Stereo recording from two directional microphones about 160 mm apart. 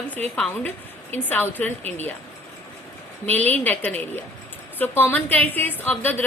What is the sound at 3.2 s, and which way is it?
A woman's voice, 10° left (ahead or behind).